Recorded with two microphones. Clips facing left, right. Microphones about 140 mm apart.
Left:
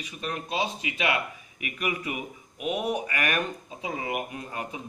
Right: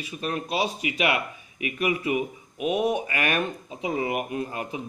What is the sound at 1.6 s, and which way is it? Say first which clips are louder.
Speech: right 6 dB; 25° right (ahead or behind).